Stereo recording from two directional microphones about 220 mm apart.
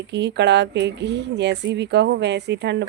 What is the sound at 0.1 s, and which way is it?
A woman's voice, 50° right (ahead or behind).